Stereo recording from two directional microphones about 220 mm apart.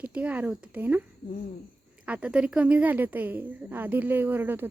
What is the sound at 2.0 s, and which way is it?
A woman's voice, 5° right (ahead or behind).